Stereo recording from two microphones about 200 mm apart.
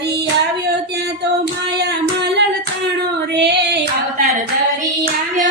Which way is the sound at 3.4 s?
55° right (ahead or behind).